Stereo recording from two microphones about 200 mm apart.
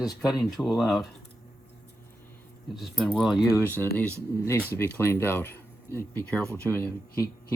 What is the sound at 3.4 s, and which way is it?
Speech, 15° left (ahead or behind).